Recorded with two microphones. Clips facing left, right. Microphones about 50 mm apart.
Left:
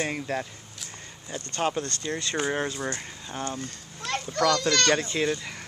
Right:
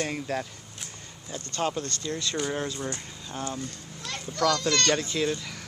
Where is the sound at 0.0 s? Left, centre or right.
Centre.